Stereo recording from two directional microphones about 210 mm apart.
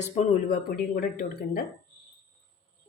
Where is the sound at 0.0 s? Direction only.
35° left (ahead or behind).